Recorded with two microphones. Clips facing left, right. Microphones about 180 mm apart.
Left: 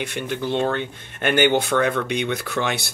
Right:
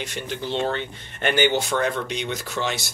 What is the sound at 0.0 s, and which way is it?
Speech, 55° left (ahead or behind).